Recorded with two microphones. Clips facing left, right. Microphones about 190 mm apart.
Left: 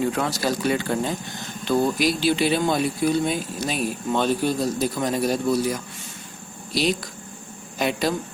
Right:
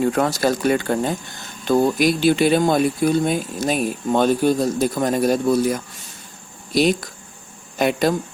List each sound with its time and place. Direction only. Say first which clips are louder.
0.0 s speech: right 5 dB; 50° right (ahead or behind)